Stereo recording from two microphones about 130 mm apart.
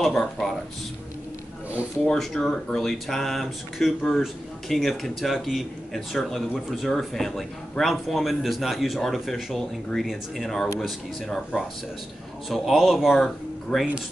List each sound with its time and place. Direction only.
0.0 s speech: 5° left (ahead or behind)
2.0 s speech: 5° left (ahead or behind)